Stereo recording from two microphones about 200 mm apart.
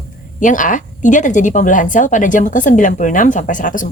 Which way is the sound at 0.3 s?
40° left (ahead or behind).